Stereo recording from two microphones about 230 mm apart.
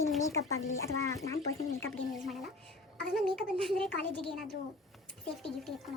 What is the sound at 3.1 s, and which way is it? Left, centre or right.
Speech, centre.